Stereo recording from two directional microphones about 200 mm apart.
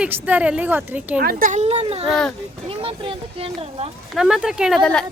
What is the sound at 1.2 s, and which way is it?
Speech, 45° right (ahead or behind).